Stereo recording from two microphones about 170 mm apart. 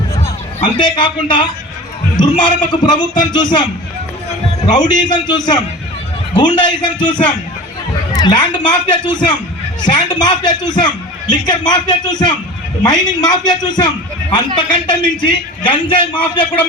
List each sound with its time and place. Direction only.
0.6 s a man's voice: 25° left (ahead or behind)
4.8 s a man's voice: 25° left (ahead or behind)
7.0 s a man's voice: 10° left (ahead or behind)
8.1 s a man's voice: 25° left (ahead or behind)